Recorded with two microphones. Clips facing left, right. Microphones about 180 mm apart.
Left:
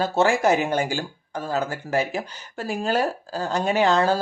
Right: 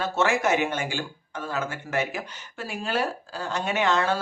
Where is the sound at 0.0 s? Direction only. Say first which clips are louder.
Left 4 dB; 35° left (ahead or behind).